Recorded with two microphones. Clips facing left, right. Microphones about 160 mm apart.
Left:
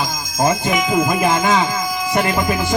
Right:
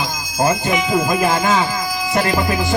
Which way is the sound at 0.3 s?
5° right (ahead or behind).